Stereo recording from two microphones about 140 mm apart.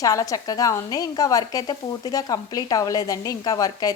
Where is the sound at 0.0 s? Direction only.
25° left (ahead or behind).